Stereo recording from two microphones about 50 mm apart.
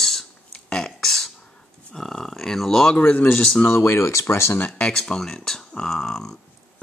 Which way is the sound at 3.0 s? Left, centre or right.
Left.